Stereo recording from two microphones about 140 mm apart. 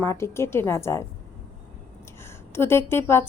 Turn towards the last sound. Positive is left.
turn(degrees=15)  # may be behind; listen again after turning